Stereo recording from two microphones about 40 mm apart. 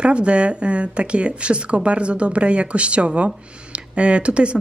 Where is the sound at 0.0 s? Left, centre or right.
Right.